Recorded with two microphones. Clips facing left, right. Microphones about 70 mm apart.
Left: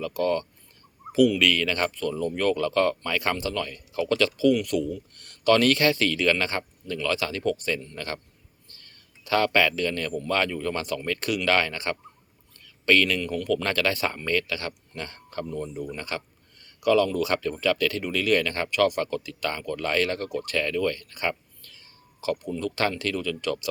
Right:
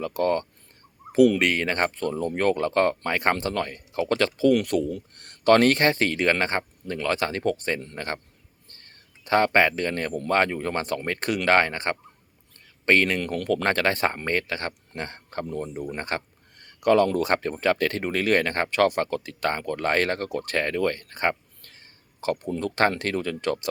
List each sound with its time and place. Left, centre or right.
0.0 s speech: right
8.6 s a sound: right
10.2 s speech: right